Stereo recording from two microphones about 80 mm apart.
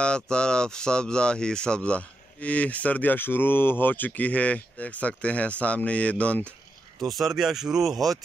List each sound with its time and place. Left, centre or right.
0.0 s speech: centre
7.1 s speech: centre